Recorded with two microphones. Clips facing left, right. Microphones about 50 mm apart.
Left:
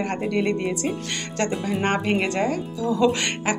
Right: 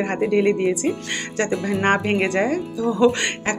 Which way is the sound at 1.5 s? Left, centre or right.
Right.